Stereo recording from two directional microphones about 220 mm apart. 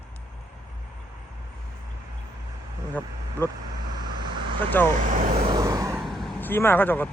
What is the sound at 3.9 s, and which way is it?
Vehicle, 20° right (ahead or behind).